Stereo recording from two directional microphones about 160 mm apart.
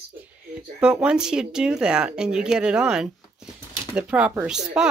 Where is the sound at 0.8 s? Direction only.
5° right (ahead or behind).